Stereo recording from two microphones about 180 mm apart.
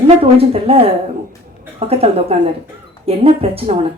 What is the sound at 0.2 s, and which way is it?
Speech, 30° right (ahead or behind).